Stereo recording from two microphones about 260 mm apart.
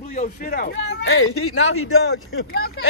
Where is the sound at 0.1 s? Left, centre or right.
Left.